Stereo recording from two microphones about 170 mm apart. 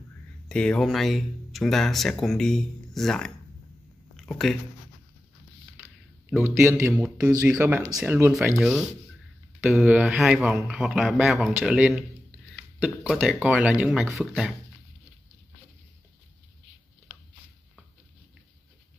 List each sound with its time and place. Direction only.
0.5 s speech: 5° left (ahead or behind)
6.4 s speech: 15° right (ahead or behind)